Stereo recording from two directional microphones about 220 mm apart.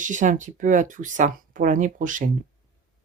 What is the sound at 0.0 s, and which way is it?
Speech, 35° right (ahead or behind).